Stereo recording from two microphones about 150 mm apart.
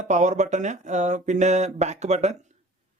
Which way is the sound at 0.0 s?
50° right (ahead or behind).